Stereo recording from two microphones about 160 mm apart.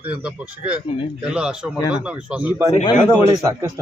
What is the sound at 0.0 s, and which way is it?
Speech, 5° right (ahead or behind).